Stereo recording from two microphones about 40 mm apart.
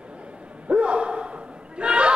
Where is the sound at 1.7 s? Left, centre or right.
Right.